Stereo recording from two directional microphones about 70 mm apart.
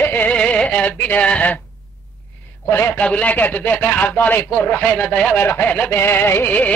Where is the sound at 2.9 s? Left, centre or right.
Centre.